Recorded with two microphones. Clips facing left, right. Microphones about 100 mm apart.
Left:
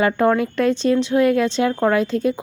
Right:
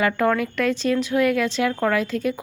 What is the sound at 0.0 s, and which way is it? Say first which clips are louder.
A woman's voice: left 3 dB; 25° left (ahead or behind).